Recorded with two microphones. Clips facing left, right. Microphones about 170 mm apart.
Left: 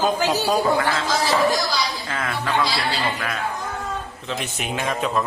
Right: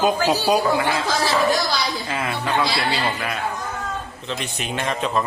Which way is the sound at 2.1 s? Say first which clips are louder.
Right 1 dB; 15° right (ahead or behind).